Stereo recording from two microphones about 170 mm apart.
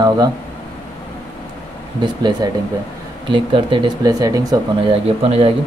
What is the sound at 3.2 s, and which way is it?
Speech, 30° right (ahead or behind).